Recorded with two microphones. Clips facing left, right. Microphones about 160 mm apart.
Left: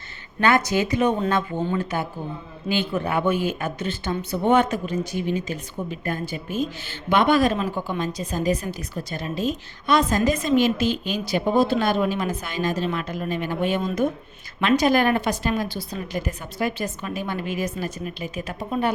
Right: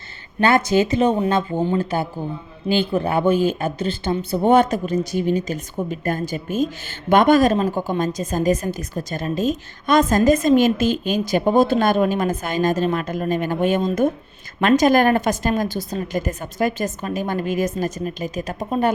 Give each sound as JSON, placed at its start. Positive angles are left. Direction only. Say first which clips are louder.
{"t": 0.3, "sound": "speech", "louder": "right 4 dB", "side_deg": -30}